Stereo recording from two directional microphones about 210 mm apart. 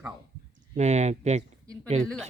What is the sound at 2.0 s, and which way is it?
Speech, 5° left (ahead or behind).